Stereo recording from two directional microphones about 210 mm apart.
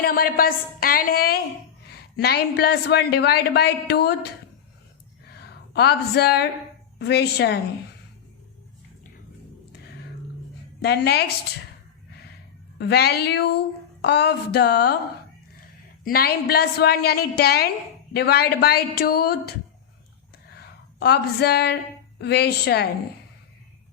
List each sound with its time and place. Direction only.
0.0 s a woman's voice: 45° left (ahead or behind)
5.2 s a sound: 50° left (ahead or behind)
7.0 s a woman's voice: 50° left (ahead or behind)
10.8 s a woman's voice: 50° left (ahead or behind)
12.8 s a woman's voice: 50° left (ahead or behind)
16.0 s a woman's voice: 45° left (ahead or behind)
20.6 s a woman's voice: 50° left (ahead or behind)